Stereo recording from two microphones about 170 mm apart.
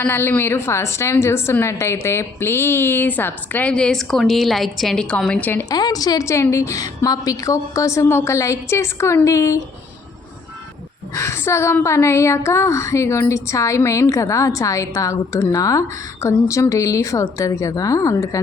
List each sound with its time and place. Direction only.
0.0 s a woman's voice: 15° left (ahead or behind)
11.1 s a woman's voice: 15° left (ahead or behind)